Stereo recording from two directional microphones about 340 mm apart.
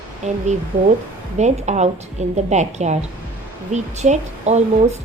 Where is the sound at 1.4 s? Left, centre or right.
Centre.